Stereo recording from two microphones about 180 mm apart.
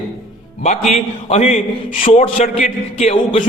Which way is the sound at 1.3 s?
35° left (ahead or behind).